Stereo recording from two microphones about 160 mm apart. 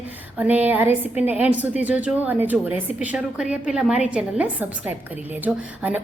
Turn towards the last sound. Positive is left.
turn(degrees=-10)  # may be behind; listen again after turning